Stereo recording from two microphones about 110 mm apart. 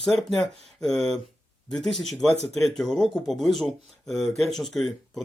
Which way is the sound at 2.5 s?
5° left (ahead or behind).